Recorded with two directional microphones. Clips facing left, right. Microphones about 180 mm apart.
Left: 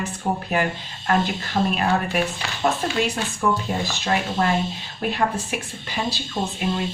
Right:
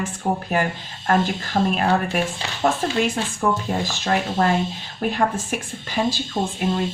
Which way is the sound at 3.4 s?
40° right (ahead or behind).